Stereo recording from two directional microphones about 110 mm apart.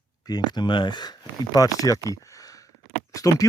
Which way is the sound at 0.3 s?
40° left (ahead or behind).